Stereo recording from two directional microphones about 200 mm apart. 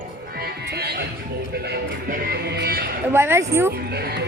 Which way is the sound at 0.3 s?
50° right (ahead or behind).